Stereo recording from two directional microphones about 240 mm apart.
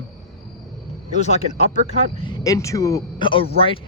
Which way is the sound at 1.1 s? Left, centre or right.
Left.